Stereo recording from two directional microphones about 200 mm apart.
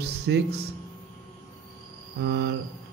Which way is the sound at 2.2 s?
55° right (ahead or behind).